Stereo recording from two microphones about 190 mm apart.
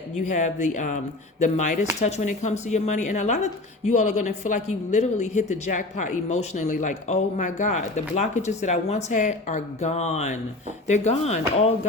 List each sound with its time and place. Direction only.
0.3 s speech: 40° left (ahead or behind)